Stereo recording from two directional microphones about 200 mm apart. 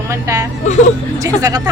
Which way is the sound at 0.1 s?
15° right (ahead or behind).